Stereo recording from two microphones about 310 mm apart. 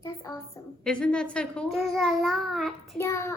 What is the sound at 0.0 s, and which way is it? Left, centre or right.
A woman's voice, centre.